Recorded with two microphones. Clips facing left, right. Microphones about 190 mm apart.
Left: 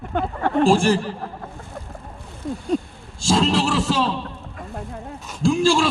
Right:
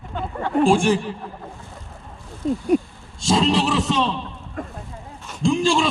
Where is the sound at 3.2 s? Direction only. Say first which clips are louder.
Even; centre (ahead or behind).